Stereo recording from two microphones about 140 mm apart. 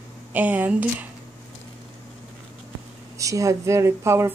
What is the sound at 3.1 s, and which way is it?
Speech, 25° right (ahead or behind).